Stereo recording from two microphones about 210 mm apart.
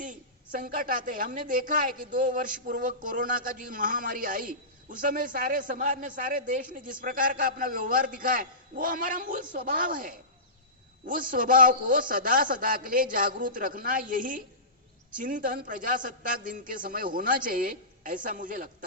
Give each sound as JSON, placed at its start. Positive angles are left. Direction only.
{"t": 0.0, "sound": "a woman's voice", "side_deg": -40}